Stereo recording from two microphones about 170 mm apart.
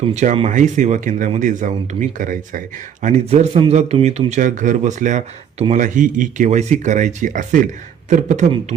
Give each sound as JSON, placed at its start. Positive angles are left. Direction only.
{"t": 0.1, "sound": "speech", "side_deg": -40}